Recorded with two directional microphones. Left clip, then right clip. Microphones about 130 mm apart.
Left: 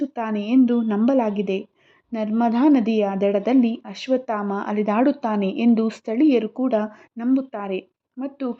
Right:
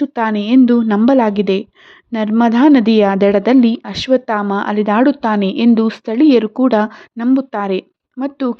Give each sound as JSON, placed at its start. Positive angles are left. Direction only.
{"t": 0.0, "sound": "a woman's voice", "side_deg": -35}